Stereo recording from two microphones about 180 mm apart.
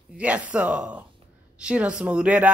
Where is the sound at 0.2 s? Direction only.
5° right (ahead or behind).